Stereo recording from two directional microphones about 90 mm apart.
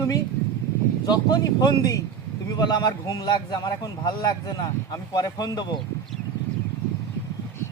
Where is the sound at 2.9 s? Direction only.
40° left (ahead or behind).